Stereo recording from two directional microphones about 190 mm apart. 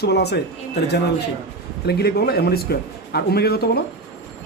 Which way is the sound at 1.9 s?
55° left (ahead or behind).